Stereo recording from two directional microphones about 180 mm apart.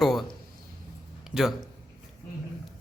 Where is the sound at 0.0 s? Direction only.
Centre (ahead or behind).